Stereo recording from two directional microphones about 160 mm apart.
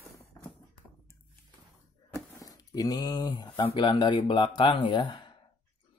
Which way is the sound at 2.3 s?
25° left (ahead or behind).